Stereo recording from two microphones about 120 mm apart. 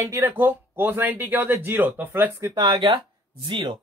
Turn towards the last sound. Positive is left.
turn(degrees=-40)  # may be behind; listen again after turning